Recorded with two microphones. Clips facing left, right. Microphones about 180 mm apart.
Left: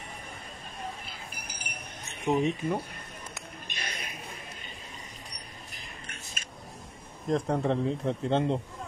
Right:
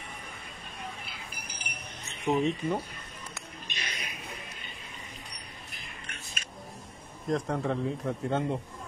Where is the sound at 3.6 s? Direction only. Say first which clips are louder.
Left 1 dB; 50° left (ahead or behind).